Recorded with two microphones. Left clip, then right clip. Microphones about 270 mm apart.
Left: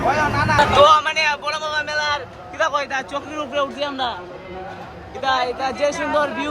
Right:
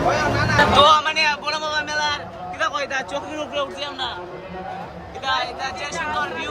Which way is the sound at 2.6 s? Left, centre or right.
Centre.